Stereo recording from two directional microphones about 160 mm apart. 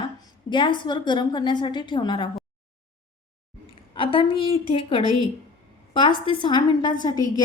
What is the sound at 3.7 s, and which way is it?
A woman's voice, 35° left (ahead or behind).